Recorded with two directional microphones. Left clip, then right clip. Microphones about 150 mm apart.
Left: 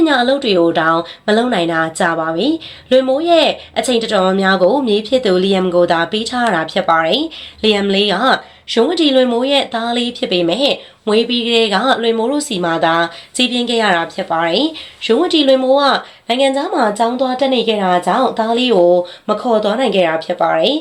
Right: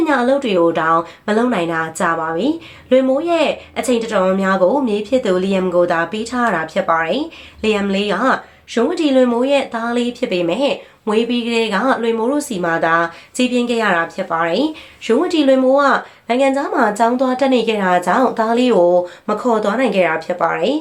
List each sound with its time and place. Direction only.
0.0 s speech: 20° left (ahead or behind)